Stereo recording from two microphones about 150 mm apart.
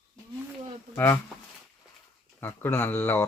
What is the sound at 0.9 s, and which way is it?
Speech, 15° left (ahead or behind).